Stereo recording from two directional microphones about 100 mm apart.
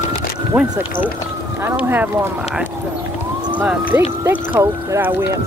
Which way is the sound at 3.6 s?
15° right (ahead or behind).